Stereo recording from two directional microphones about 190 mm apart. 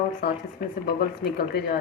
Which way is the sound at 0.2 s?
50° left (ahead or behind).